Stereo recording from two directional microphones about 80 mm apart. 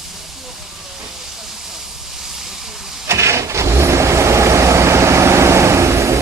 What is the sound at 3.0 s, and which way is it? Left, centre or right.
Vehicle, right.